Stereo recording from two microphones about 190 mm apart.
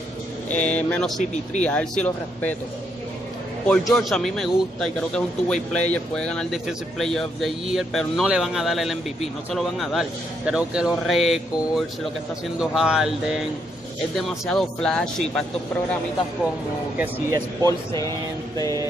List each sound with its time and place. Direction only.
0.5 s speech: 5° left (ahead or behind)
3.6 s speech: 5° left (ahead or behind)
17.6 s speech: 15° left (ahead or behind)